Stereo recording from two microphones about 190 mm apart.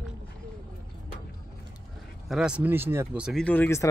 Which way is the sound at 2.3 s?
5° right (ahead or behind).